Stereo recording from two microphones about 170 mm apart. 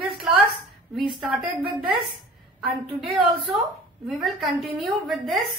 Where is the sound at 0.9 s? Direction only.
Centre (ahead or behind).